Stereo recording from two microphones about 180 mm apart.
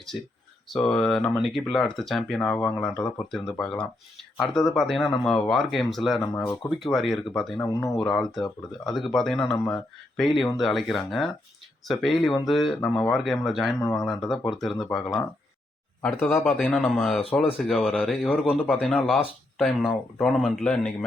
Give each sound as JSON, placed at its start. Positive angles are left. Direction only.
{"t": 0.1, "sound": "speech", "side_deg": -5}
{"t": 7.6, "sound": "speech", "side_deg": 15}
{"t": 8.1, "sound": "speech", "side_deg": 0}